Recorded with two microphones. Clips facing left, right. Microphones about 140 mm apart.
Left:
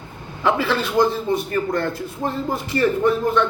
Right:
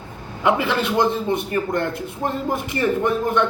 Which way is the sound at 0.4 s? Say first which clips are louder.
Right 1 dB; 20° right (ahead or behind).